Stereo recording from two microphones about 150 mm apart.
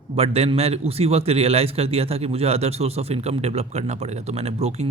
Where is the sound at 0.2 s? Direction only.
40° right (ahead or behind).